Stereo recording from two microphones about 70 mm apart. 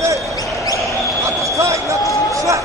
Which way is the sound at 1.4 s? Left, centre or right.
Right.